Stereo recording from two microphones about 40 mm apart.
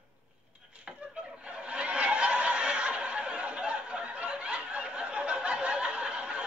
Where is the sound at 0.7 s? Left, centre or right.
Right.